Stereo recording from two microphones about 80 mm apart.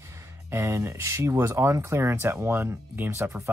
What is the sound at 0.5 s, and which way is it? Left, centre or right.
Speech, right.